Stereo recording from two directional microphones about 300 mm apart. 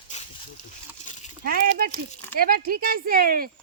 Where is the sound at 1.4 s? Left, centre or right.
Right.